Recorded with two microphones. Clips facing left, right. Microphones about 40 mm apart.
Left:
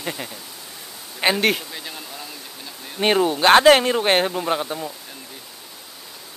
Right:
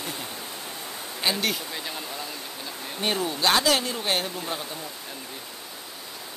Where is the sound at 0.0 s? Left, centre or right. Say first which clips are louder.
Left 4 dB; left.